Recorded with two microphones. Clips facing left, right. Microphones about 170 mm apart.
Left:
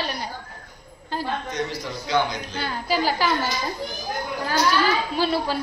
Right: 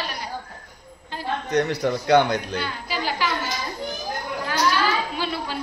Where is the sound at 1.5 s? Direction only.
65° right (ahead or behind).